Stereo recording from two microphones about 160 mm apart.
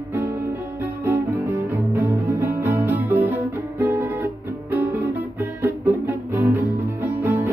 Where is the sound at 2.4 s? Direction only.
15° right (ahead or behind).